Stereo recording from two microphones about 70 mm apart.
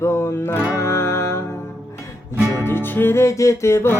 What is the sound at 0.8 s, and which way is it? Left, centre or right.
Music, left.